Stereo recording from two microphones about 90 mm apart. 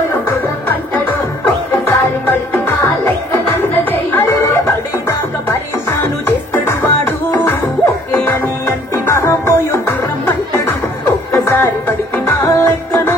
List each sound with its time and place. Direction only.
1.7 s music: 25° left (ahead or behind)
11.3 s music: 30° left (ahead or behind)